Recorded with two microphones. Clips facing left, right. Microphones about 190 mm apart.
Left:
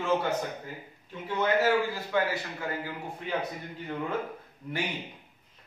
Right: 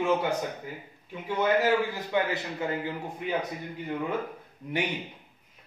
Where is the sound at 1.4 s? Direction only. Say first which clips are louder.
Right 1 dB; 15° right (ahead or behind).